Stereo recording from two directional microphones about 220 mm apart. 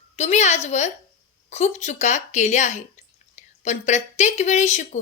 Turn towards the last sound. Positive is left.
turn(degrees=30)  # may be behind; listen again after turning